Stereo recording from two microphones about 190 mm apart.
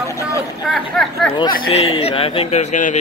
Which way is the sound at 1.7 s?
30° left (ahead or behind).